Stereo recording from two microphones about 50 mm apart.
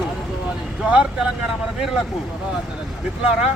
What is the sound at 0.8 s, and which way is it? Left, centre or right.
Speech, right.